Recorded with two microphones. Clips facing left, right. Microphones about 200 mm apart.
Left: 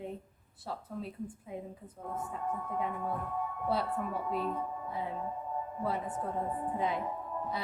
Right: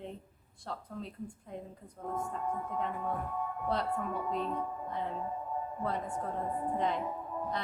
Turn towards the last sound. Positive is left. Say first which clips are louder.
# right 1 dB
turn(degrees=5)  # may be behind; listen again after turning